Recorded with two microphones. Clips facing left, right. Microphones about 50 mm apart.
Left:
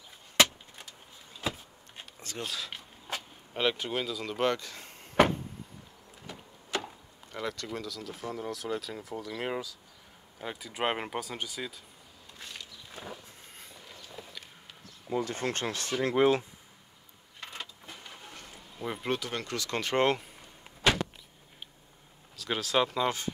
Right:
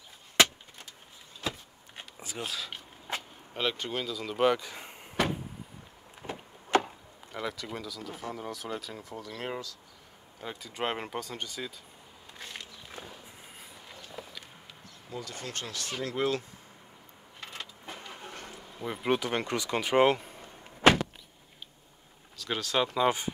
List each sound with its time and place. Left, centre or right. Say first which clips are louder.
2.1 s speech: even; centre
6.2 s wood: right 6 dB; right
6.7 s chop: right 8 dB; right
7.3 s speech: even; centre
12.4 s bee: right 2 dB; right
15.0 s speech: left 8 dB; left
17.4 s vehicle: even; centre
18.2 s a sound: right 4 dB; right
18.8 s speech: even; centre
19.0 s speech: right 6 dB; right; by 20.3 s centre
20.8 s power windows: right 5 dB; right
22.4 s speech: left 1 dB; centre
23.0 s speech: right 4 dB; centre